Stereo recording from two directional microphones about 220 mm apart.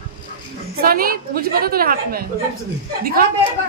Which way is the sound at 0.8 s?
40° right (ahead or behind).